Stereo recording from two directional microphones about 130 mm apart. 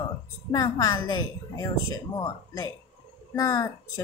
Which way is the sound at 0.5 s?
30° left (ahead or behind).